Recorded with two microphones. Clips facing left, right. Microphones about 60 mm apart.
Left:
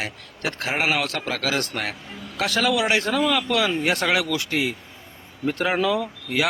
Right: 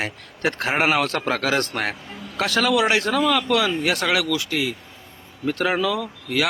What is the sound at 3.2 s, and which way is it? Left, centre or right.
Speech, centre.